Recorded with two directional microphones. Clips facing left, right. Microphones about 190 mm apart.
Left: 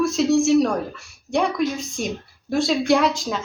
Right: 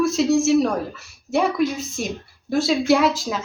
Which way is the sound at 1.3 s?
5° right (ahead or behind).